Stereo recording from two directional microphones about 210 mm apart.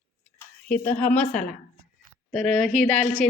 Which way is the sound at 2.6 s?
35° right (ahead or behind).